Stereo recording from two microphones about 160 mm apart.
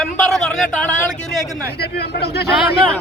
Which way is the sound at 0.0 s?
Centre (ahead or behind).